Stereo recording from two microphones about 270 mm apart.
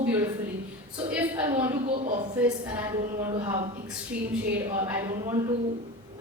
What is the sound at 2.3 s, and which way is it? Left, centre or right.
Speech, centre.